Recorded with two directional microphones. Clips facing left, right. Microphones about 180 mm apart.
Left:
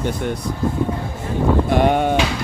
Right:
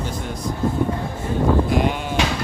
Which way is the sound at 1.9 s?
60° left (ahead or behind).